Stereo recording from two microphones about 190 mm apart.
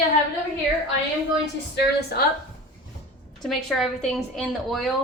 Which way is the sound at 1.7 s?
55° left (ahead or behind).